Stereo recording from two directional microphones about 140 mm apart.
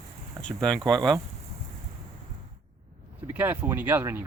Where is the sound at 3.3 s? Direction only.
15° right (ahead or behind).